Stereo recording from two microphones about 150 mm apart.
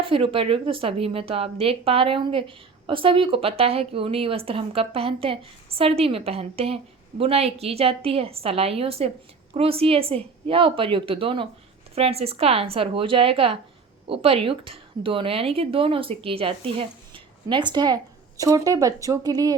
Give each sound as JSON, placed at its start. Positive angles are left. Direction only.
{"t": 0.0, "sound": "a woman's voice", "side_deg": -35}